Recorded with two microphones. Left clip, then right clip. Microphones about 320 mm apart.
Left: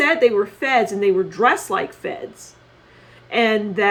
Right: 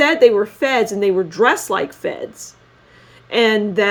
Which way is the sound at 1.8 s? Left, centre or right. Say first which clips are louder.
Right 3 dB; right.